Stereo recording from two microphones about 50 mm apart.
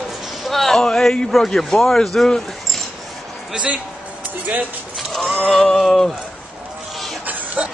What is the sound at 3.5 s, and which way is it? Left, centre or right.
Speech, right.